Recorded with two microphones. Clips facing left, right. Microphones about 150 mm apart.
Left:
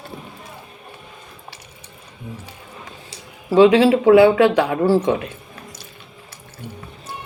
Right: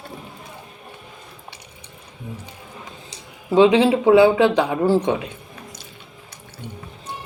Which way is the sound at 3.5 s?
20° right (ahead or behind).